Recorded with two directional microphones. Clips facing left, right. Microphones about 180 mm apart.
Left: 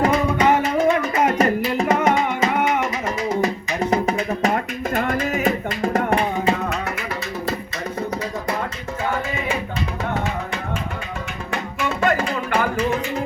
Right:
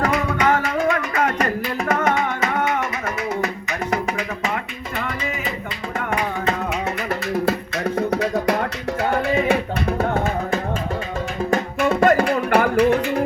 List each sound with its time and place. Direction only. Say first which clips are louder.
0.0 s music: left 2 dB; 25° left (ahead or behind)
4.0 s music: left 4 dB; 40° left (ahead or behind)
7.9 s music: right 6 dB; 75° right (ahead or behind)
11.5 s music: right 5 dB; 50° right (ahead or behind)